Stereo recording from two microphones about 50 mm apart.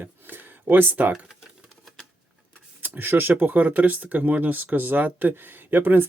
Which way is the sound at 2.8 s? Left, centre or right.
Right.